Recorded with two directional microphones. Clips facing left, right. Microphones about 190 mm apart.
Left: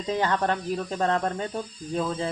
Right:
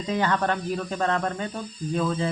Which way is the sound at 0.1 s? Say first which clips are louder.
Even; 30° left (ahead or behind).